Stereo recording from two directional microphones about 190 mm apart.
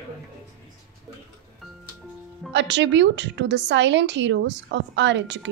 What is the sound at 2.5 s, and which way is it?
A woman's voice, 65° right (ahead or behind).